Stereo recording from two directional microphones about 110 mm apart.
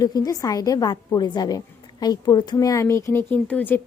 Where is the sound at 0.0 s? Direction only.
35° left (ahead or behind).